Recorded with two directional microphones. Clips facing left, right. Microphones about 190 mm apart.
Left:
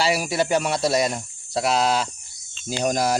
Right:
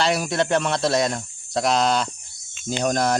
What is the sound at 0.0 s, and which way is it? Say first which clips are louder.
Speech: even; 5° left (ahead or behind).